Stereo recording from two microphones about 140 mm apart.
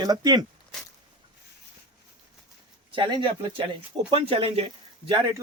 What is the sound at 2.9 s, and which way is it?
Speech, 35° right (ahead or behind).